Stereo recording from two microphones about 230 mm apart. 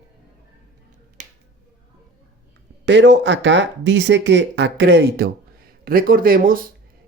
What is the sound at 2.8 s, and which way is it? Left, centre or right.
Speech, right.